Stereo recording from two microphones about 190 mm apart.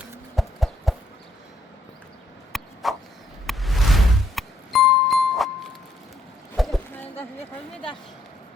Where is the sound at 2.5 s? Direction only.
Centre (ahead or behind).